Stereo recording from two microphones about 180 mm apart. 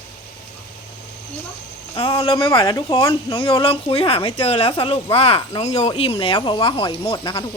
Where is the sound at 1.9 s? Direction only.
30° left (ahead or behind).